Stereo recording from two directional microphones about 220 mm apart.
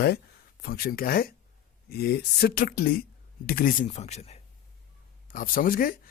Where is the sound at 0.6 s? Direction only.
45° left (ahead or behind).